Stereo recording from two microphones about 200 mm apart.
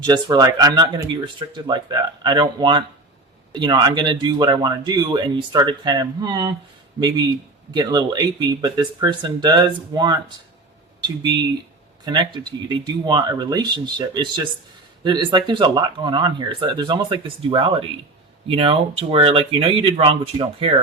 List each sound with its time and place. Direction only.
0.0 s speech: 20° right (ahead or behind)
7.7 s speech: 20° right (ahead or behind)
12.0 s speech: 25° right (ahead or behind)